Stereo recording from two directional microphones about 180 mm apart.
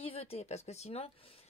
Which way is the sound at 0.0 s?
30° left (ahead or behind).